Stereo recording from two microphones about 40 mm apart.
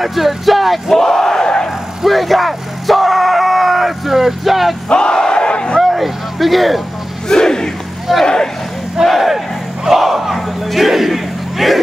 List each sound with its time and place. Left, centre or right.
0.0 s speech: centre
2.0 s speech: centre
4.8 s battle cry: left
5.8 s vehicle: centre
7.2 s battle cry: centre
8.1 s speech: centre
9.0 s battle cry: centre